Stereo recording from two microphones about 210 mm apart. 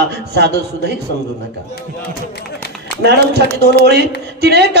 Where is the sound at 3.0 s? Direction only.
50° right (ahead or behind).